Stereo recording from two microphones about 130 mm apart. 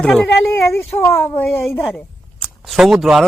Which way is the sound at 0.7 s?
20° left (ahead or behind).